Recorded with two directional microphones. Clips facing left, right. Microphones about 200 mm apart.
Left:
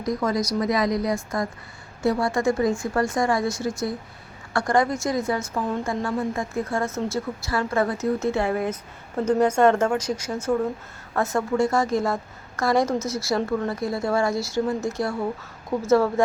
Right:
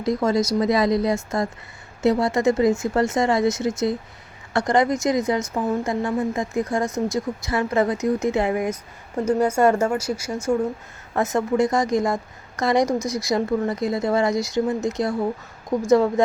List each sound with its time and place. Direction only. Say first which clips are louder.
0.0 s speech: right 4 dB; 25° right (ahead or behind)